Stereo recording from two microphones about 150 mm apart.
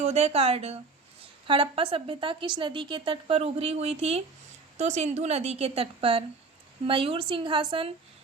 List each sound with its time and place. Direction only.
0.0 s a woman's voice: 45° right (ahead or behind)